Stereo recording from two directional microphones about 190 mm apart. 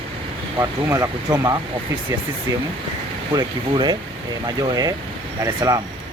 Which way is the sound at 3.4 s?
25° right (ahead or behind).